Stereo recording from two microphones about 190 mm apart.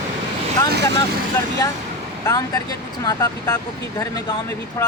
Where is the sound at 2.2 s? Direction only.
20° left (ahead or behind).